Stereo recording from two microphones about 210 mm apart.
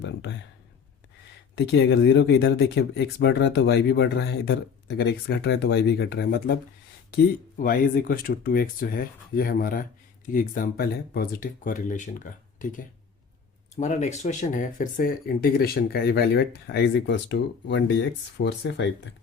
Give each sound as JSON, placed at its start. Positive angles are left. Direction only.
{"t": 0.0, "sound": "speech", "side_deg": 55}
{"t": 1.5, "sound": "speech", "side_deg": 60}
{"t": 7.6, "sound": "speech", "side_deg": 40}